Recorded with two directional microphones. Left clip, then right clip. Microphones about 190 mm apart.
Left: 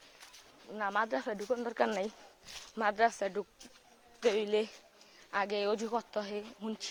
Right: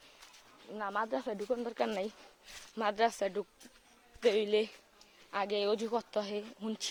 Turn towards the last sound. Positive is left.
turn(degrees=-20)  # may be behind; listen again after turning